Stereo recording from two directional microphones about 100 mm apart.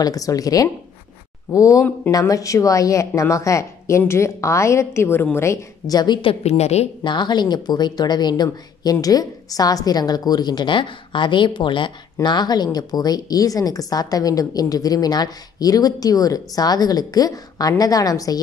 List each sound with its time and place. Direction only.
0.0 s a woman's voice: 35° left (ahead or behind)
6.2 s a woman's voice: 90° left
7.0 s a woman's voice: 50° left (ahead or behind)